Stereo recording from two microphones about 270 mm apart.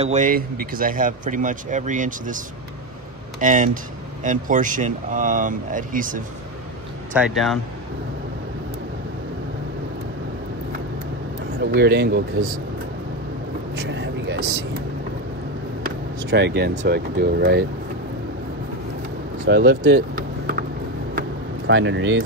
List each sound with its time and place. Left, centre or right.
0.0 s speech: right
7.2 s speech: centre
11.6 s speech: right
13.7 s vehicle: right
16.3 s speech: right
19.4 s vehicle: right